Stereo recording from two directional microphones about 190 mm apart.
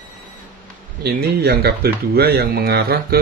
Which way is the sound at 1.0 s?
55° right (ahead or behind).